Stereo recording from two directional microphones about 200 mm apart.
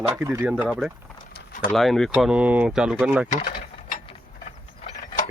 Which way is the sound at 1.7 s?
Centre (ahead or behind).